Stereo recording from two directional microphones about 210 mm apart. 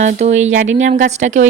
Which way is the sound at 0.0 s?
35° right (ahead or behind).